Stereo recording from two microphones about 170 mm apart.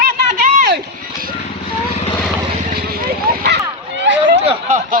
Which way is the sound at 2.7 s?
60° right (ahead or behind).